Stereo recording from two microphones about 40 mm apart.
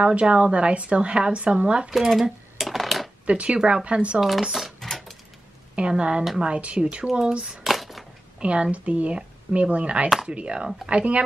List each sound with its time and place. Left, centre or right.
0.0 s a woman's voice: right
2.0 s coin: centre
3.3 s a woman's voice: right
4.4 s speech: centre
4.7 s a sound: centre
5.8 s a woman's voice: right
7.6 s a sound: centre
8.4 s a woman's voice: right